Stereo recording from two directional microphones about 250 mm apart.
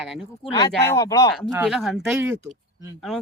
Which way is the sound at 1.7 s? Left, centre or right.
Centre.